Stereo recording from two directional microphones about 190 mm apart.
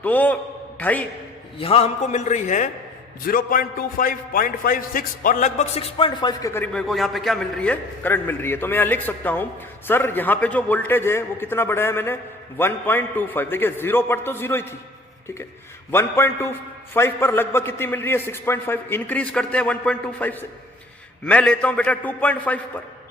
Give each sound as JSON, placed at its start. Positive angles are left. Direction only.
{"t": 0.0, "sound": "a man's voice", "side_deg": 10}
{"t": 1.5, "sound": "a man's voice", "side_deg": 30}
{"t": 6.5, "sound": "a man's voice", "side_deg": 5}
{"t": 15.9, "sound": "a man's voice", "side_deg": 15}